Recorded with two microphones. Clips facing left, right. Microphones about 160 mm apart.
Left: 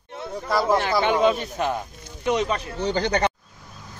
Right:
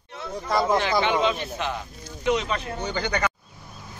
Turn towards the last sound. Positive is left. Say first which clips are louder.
# left 4 dB
turn(degrees=35)  # may be behind; listen again after turning